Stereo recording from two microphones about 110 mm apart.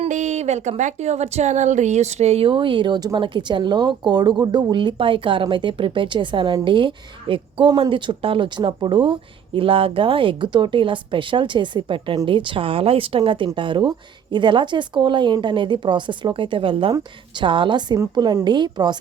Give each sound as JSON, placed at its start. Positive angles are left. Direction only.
{"t": 0.0, "sound": "a woman's voice", "side_deg": -90}